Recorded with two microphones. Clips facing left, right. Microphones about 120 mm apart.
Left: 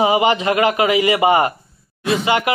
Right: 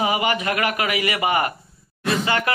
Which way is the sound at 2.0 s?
Centre (ahead or behind).